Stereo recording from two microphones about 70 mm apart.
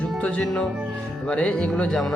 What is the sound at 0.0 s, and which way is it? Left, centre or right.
Music, centre.